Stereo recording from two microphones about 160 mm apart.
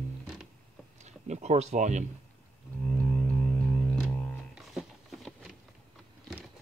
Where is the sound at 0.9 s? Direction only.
45° right (ahead or behind).